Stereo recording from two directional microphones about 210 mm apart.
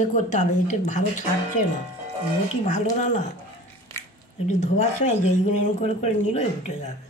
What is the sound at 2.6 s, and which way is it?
Speech, 35° left (ahead or behind).